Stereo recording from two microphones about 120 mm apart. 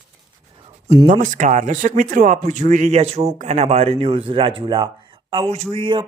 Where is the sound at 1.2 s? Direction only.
90° right; by 4.9 s 45° right (ahead or behind).